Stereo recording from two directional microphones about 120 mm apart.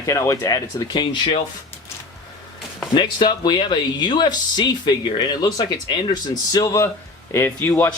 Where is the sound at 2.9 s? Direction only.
40° left (ahead or behind).